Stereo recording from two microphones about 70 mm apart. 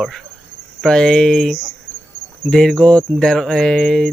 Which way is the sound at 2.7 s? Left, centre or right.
Centre.